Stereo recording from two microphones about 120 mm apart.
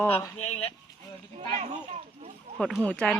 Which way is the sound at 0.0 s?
20° left (ahead or behind).